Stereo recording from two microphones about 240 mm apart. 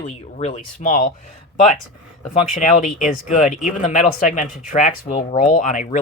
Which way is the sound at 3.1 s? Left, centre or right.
Left.